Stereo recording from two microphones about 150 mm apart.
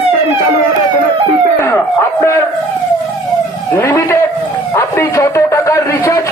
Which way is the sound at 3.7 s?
15° left (ahead or behind).